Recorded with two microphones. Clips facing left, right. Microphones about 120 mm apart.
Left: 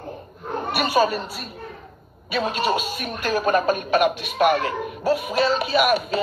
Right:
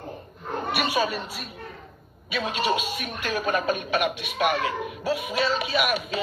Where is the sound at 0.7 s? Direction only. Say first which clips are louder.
Left 6 dB; 40° left (ahead or behind).